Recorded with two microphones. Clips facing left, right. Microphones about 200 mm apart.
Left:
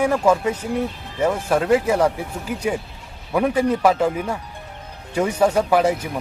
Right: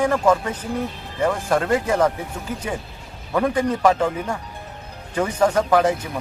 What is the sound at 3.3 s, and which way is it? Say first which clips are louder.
Speech: left 2 dB; 10° left (ahead or behind).